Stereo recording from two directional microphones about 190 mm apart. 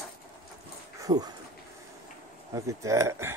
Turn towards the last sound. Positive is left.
turn(degrees=-15)  # may be behind; listen again after turning